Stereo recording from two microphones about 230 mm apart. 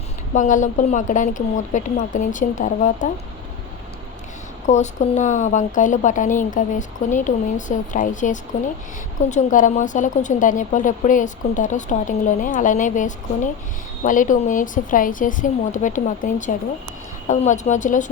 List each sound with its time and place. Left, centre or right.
0.3 s speech: left
4.6 s speech: left